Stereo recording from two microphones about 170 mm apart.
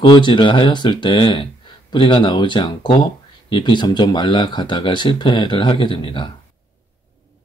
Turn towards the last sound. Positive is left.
turn(degrees=30)  # may be behind; listen again after turning